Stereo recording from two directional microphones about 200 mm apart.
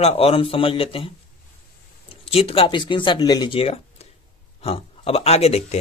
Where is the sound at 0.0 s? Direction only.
30° left (ahead or behind).